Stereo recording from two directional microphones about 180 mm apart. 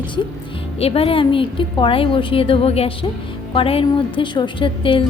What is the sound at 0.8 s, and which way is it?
A woman's voice, 30° left (ahead or behind).